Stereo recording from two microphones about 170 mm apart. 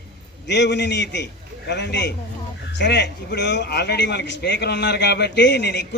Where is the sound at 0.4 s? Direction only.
90° left.